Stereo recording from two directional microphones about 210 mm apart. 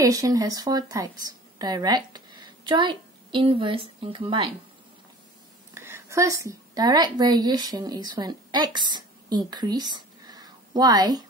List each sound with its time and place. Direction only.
0.0 s a woman's voice: 15° right (ahead or behind)
5.8 s a woman's voice: 10° right (ahead or behind)